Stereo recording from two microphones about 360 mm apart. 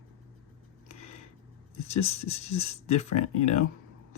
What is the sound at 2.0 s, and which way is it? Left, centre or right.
Speech, centre.